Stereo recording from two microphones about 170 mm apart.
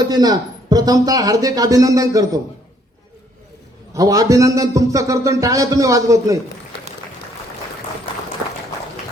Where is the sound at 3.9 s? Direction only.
20° right (ahead or behind).